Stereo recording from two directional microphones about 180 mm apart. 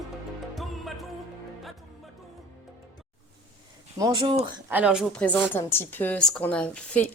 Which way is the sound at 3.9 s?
20° right (ahead or behind).